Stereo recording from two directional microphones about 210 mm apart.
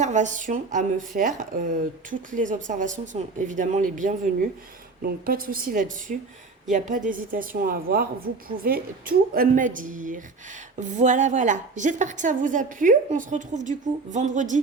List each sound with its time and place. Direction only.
0.0 s a woman's voice: 35° right (ahead or behind)